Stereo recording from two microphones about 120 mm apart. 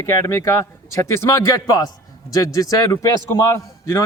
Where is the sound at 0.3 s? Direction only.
20° left (ahead or behind).